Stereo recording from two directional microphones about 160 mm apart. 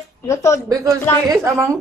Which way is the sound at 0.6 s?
20° right (ahead or behind).